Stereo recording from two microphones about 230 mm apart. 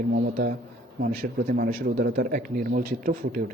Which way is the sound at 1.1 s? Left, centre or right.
Right.